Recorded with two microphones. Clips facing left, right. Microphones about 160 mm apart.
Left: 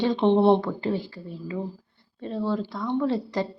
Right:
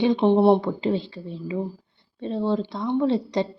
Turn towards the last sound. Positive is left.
turn(degrees=-20)  # may be behind; listen again after turning